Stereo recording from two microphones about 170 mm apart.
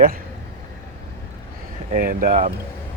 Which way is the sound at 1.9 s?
55° right (ahead or behind).